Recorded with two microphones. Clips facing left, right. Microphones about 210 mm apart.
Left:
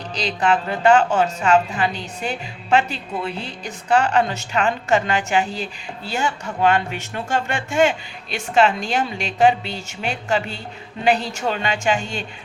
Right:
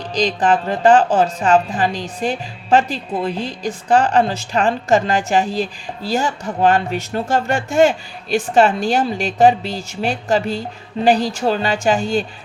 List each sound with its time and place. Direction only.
0.2 s a woman's voice: 40° right (ahead or behind)